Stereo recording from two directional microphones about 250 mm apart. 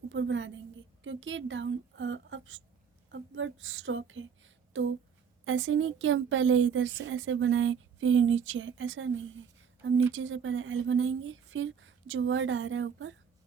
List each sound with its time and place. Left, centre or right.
0.1 s a woman's voice: right